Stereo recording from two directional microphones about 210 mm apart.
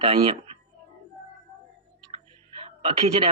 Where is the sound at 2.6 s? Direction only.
30° right (ahead or behind).